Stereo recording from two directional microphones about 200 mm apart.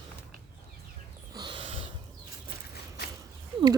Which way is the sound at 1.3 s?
20° right (ahead or behind).